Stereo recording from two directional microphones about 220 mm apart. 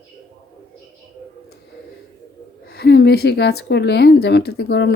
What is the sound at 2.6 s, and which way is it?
Speech, 45° left (ahead or behind).